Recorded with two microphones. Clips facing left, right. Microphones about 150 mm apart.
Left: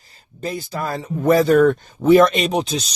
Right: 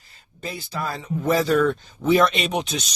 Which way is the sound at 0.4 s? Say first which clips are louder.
Left 4 dB; 45° left (ahead or behind).